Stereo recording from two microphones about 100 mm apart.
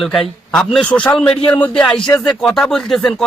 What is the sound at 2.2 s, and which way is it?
A man's voice, 5° left (ahead or behind).